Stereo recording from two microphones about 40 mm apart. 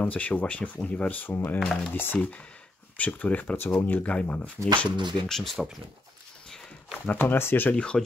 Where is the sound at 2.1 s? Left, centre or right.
Left.